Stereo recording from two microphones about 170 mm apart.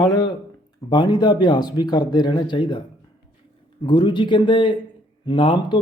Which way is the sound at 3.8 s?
30° left (ahead or behind).